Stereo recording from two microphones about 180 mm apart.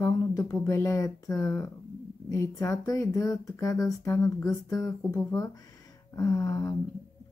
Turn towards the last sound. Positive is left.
turn(degrees=20)  # may be behind; listen again after turning